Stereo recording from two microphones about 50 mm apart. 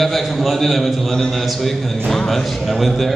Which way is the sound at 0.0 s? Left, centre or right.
Centre.